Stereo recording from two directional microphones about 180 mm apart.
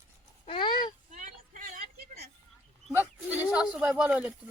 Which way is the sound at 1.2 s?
45° right (ahead or behind).